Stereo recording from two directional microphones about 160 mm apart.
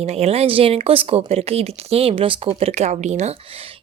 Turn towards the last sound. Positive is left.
turn(degrees=-35)  # may be behind; listen again after turning